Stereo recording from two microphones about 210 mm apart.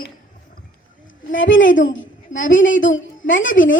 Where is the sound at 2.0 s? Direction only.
65° left (ahead or behind).